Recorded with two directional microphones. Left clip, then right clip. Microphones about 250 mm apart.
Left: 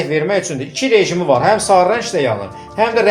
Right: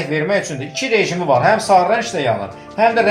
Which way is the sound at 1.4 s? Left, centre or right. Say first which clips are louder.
Even; left.